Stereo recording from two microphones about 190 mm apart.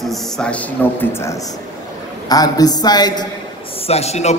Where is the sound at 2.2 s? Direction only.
20° left (ahead or behind).